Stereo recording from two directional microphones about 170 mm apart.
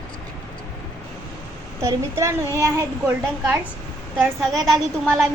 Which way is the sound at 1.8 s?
15° right (ahead or behind).